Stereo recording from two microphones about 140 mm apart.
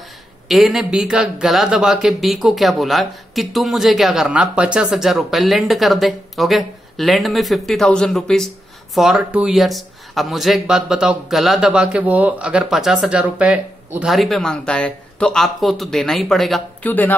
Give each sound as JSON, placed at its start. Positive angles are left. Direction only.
{"t": 0.5, "sound": "speech", "side_deg": 0}
{"t": 16.8, "sound": "speech", "side_deg": 10}